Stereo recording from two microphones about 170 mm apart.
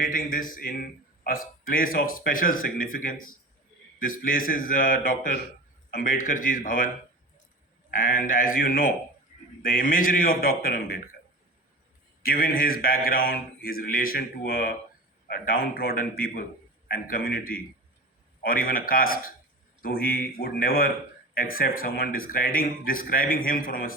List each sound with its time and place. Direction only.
0.0 s a man's voice: 55° left (ahead or behind)
7.9 s a man's voice: 55° left (ahead or behind)
12.2 s speech: 60° left (ahead or behind)